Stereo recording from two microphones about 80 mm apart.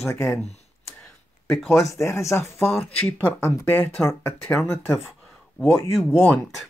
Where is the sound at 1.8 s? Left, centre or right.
Centre.